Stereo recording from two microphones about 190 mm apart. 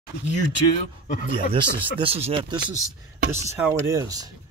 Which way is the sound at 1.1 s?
45° left (ahead or behind).